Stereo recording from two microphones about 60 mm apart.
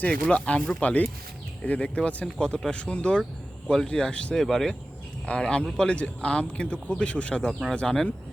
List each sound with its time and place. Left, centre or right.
0.0 s speech: centre
4.4 s speech: centre